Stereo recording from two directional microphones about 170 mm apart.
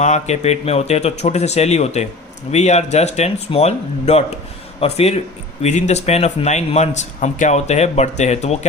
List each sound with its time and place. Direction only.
0.0 s a man's voice: 45° left (ahead or behind)